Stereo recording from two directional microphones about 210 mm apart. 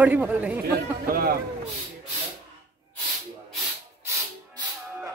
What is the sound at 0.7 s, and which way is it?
Speech, 45° right (ahead or behind).